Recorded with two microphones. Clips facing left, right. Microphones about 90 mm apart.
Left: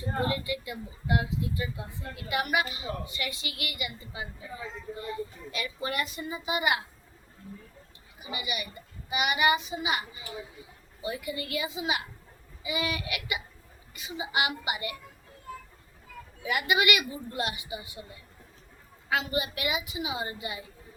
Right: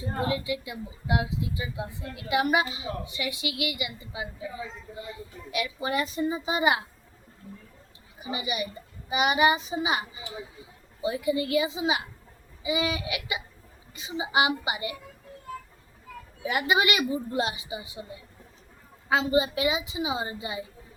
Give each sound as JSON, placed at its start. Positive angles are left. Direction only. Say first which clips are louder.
{"t": 0.0, "sound": "speech", "louder": "right 1 dB", "side_deg": -15}
{"t": 5.9, "sound": "a child's voice", "louder": "right 10 dB", "side_deg": -25}
{"t": 8.2, "sound": "a child's voice", "louder": "right 5 dB", "side_deg": -30}
{"t": 16.4, "sound": "a child's voice", "louder": "right 2 dB", "side_deg": -30}
{"t": 19.0, "sound": "a child's voice", "louder": "right 6 dB", "side_deg": -25}